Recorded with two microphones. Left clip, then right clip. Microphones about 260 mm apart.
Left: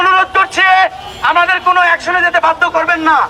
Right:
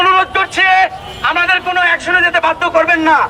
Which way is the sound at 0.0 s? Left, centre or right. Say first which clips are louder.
Left 1 dB; left.